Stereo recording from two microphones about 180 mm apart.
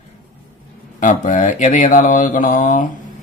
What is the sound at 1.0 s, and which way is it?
Speech, 45° left (ahead or behind).